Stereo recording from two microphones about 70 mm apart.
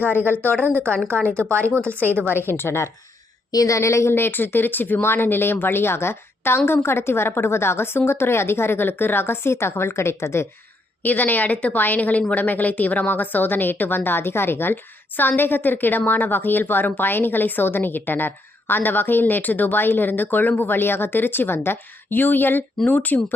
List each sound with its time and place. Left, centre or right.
0.3 s a woman's voice: left
1.4 s speech: right
2.2 s speech: left
3.5 s speech: left
11.0 s a woman's voice: left